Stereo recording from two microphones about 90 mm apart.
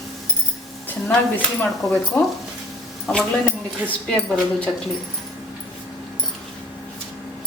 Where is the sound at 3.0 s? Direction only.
15° left (ahead or behind).